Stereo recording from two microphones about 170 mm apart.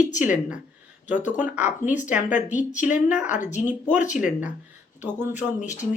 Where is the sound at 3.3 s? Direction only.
45° left (ahead or behind).